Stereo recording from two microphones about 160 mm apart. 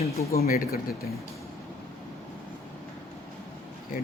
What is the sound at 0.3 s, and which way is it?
Speech, 65° left (ahead or behind).